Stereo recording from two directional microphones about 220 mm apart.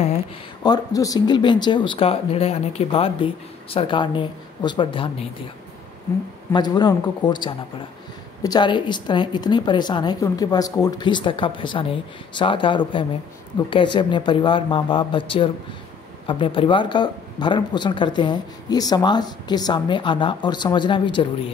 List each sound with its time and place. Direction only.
0.7 s speech: 15° left (ahead or behind)
6.5 s speech: 20° left (ahead or behind)